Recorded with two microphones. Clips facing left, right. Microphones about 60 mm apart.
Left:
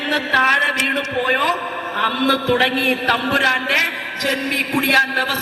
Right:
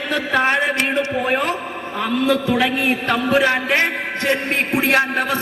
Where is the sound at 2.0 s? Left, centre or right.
Left.